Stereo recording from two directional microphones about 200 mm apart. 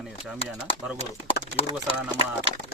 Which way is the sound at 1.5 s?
30° left (ahead or behind).